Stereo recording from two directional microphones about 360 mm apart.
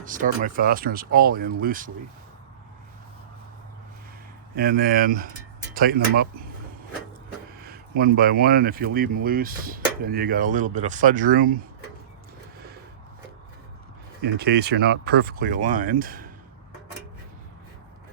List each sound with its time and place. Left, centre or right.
0.0 s speech: right
4.5 s speech: right
7.6 s speech: right
14.2 s speech: right